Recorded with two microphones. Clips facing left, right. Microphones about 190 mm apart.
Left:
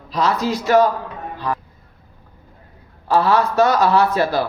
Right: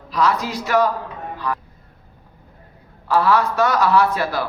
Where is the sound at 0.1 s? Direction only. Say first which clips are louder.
Left 1 dB; 25° left (ahead or behind).